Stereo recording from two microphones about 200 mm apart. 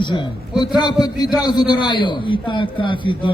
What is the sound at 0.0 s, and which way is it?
A man's voice, 25° left (ahead or behind).